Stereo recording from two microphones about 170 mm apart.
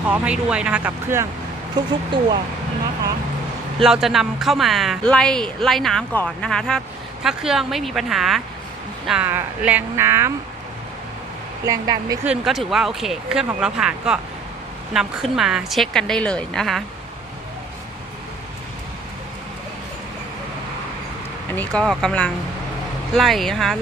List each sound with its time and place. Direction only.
0.1 s speech: 5° right (ahead or behind)
3.8 s speech: centre (ahead or behind)
11.6 s speech: 20° right (ahead or behind)
12.2 s speech: 5° right (ahead or behind)
21.5 s speech: 10° left (ahead or behind)